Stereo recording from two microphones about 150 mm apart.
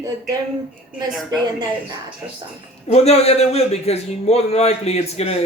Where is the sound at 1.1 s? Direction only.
Centre (ahead or behind).